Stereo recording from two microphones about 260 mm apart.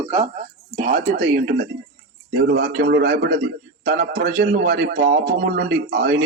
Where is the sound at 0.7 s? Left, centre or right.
Right.